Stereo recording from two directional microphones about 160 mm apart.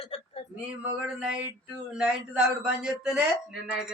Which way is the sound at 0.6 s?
5° right (ahead or behind).